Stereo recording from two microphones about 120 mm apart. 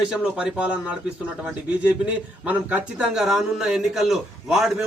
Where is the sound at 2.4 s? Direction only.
10° right (ahead or behind).